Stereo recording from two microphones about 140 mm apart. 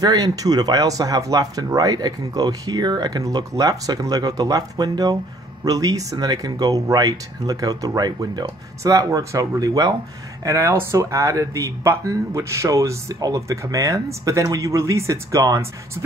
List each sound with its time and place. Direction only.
0.0 s speech: 25° right (ahead or behind)